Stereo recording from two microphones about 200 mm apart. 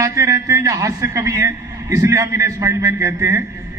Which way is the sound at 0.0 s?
15° right (ahead or behind).